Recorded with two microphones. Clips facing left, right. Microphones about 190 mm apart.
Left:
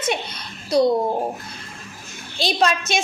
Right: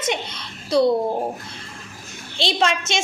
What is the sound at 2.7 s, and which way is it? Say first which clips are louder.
Speech: left 1 dB; 25° right (ahead or behind).